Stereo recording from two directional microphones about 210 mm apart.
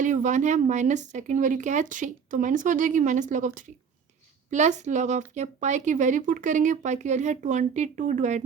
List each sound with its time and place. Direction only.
0.0 s speech: 35° right (ahead or behind)